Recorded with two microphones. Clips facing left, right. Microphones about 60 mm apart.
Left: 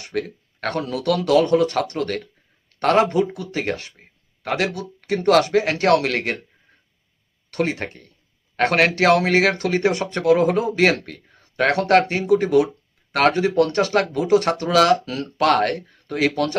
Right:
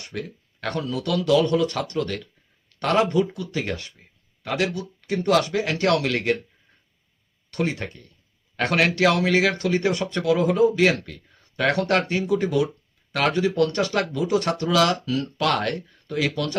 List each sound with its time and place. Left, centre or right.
0.0 s speech: left
7.5 s speech: left
10.7 s speech: left